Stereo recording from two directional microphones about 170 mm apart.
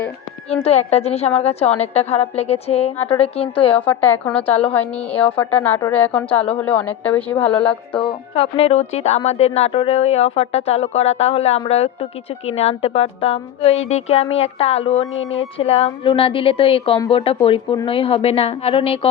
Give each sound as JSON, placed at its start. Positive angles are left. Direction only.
{"t": 0.6, "sound": "a woman's voice", "side_deg": 40}
{"t": 3.8, "sound": "a woman's voice", "side_deg": 10}
{"t": 8.4, "sound": "a woman's voice", "side_deg": 35}